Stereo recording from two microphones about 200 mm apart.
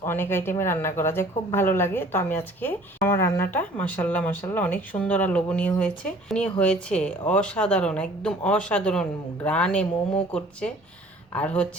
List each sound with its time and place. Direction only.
0.0 s speech: 10° left (ahead or behind)
11.3 s speech: 5° left (ahead or behind)